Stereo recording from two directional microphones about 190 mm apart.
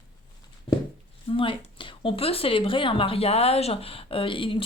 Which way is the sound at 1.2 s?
25° left (ahead or behind).